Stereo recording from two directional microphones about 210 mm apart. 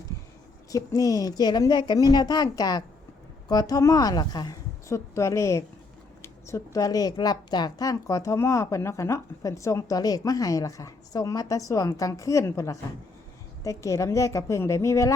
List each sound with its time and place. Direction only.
0.7 s a woman's voice: 15° left (ahead or behind)